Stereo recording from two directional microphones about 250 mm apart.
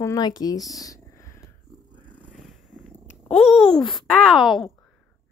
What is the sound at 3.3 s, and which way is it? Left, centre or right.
A child's voice, centre.